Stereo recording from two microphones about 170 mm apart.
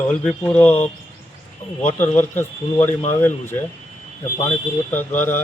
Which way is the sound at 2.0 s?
10° left (ahead or behind).